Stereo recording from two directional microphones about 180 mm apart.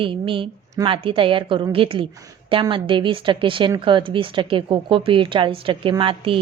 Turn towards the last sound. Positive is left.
turn(degrees=-30)  # may be behind; listen again after turning